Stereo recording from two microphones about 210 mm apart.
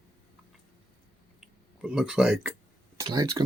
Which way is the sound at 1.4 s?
5° right (ahead or behind).